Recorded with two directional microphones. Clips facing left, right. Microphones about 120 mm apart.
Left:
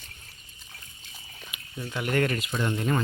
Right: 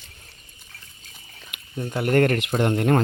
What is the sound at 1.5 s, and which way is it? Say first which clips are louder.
Speech: right 6 dB; 45° right (ahead or behind).